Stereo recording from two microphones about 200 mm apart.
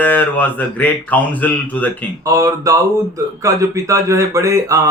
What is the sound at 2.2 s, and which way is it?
Speech, 15° right (ahead or behind).